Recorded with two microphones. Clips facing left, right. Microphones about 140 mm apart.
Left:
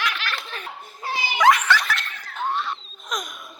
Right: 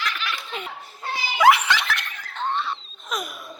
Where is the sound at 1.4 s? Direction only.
10° right (ahead or behind).